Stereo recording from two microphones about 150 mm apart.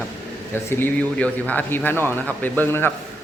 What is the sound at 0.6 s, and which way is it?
Speech, 15° left (ahead or behind).